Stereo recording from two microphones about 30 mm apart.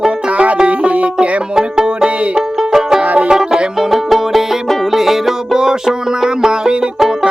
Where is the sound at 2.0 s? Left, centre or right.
Right.